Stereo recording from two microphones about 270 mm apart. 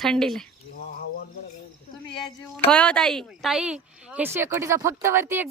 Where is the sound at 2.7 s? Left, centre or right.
Centre.